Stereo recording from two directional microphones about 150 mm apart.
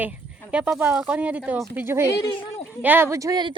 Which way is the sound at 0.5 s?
10° right (ahead or behind).